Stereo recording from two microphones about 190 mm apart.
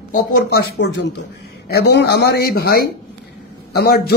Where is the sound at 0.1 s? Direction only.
60° left (ahead or behind).